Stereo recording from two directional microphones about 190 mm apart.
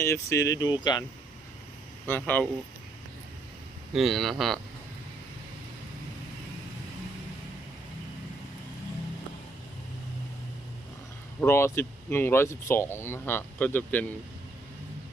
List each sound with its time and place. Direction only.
0.0 s speech: 15° left (ahead or behind)
2.0 s speech: 10° left (ahead or behind)
3.9 s speech: centre (ahead or behind)
11.3 s speech: 15° left (ahead or behind)